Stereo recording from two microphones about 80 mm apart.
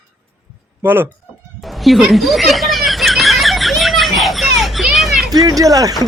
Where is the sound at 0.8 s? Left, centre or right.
Right.